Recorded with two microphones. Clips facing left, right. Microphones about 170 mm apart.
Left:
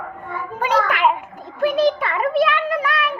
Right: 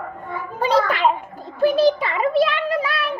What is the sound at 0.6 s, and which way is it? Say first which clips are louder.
A child's voice: right 1 dB; 35° right (ahead or behind).